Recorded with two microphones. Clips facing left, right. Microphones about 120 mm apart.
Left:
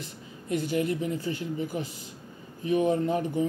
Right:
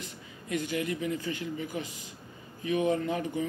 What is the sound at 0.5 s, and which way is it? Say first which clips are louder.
Speech: left 4 dB; 40° left (ahead or behind).